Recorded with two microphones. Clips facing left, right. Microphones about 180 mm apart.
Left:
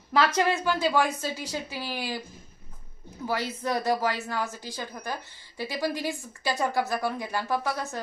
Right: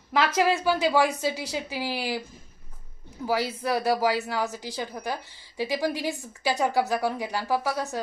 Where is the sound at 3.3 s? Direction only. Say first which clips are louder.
Right 3 dB; 10° right (ahead or behind).